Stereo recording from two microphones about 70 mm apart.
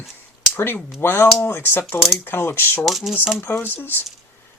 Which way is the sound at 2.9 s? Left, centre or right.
Centre.